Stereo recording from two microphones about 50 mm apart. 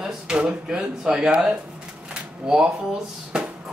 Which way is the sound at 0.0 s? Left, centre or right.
Centre.